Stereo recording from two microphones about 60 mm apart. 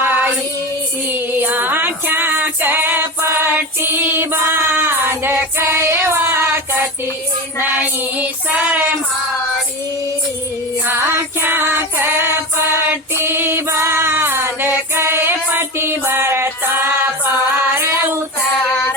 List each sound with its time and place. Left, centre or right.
0.0 s child singing: right
1.1 s music: right
4.7 s child singing: right
11.3 s child singing: right
17.7 s child singing: right